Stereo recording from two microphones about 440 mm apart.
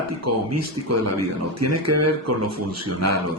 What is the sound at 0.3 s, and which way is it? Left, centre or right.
Speech, right.